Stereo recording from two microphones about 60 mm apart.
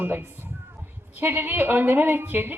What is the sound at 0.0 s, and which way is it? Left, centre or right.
A woman's voice, right.